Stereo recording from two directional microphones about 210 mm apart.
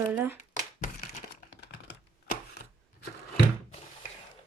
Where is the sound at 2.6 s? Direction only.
50° left (ahead or behind).